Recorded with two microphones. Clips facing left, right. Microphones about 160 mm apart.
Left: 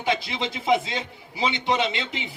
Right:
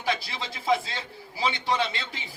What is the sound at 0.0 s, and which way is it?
A man's voice, 20° left (ahead or behind).